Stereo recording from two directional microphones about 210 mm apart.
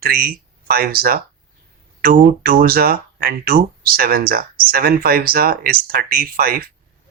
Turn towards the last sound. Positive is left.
turn(degrees=-45)  # may be behind; listen again after turning